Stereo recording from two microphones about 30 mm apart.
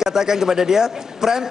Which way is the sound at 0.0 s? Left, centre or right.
Centre.